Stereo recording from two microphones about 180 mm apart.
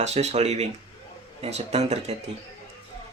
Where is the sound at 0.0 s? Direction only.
40° right (ahead or behind).